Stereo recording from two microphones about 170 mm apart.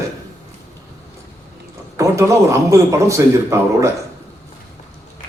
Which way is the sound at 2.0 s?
20° right (ahead or behind).